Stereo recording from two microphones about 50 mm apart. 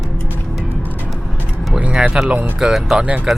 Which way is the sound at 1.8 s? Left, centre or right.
Right.